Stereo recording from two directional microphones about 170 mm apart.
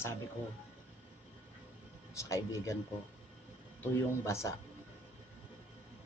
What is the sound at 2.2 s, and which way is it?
Speech, 20° left (ahead or behind).